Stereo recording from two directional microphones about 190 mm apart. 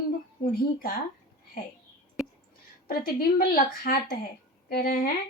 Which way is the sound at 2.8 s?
50° left (ahead or behind).